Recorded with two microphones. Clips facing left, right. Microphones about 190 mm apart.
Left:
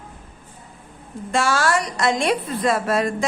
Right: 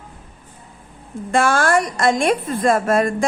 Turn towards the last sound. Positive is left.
turn(degrees=-50)  # may be behind; listen again after turning